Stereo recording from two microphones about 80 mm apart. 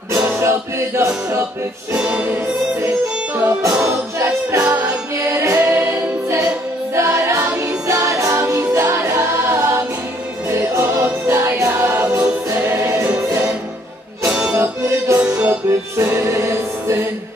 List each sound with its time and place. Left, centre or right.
0.4 s music: right
2.0 s music: centre
3.3 s music: right
5.6 s a capella: right
7.0 s music: right
14.3 s music: centre
14.6 s music: right
15.2 s music: right
16.0 s music: right